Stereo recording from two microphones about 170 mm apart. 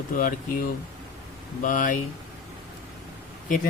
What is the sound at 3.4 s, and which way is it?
Speech, 50° left (ahead or behind).